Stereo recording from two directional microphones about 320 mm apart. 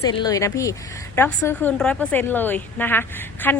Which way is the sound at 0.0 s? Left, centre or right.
Centre.